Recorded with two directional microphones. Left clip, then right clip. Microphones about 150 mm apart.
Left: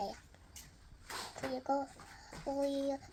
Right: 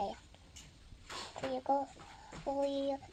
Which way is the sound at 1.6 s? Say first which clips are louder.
Right 2 dB; 15° right (ahead or behind).